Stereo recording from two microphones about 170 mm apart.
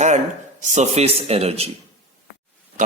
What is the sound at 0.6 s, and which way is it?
A man's voice, 45° right (ahead or behind).